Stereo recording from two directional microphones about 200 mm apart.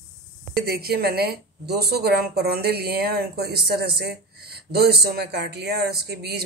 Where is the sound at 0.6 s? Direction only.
50° right (ahead or behind).